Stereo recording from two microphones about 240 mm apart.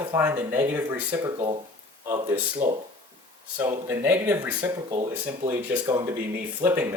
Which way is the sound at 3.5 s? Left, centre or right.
Centre.